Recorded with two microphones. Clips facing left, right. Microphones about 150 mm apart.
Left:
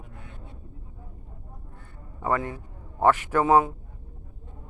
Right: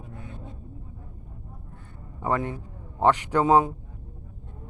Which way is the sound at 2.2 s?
20° right (ahead or behind).